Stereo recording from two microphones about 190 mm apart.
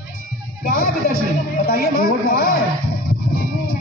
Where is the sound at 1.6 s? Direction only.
50° left (ahead or behind).